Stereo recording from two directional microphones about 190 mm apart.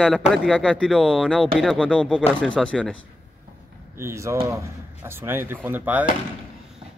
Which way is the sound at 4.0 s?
15° right (ahead or behind).